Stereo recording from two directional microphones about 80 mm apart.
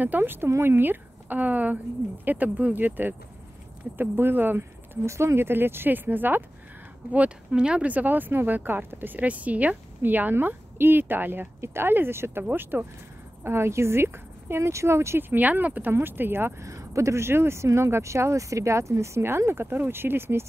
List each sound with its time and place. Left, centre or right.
0.0 s speech: right